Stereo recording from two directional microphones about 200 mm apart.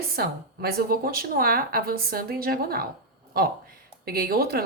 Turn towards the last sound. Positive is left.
turn(degrees=-50)  # may be behind; listen again after turning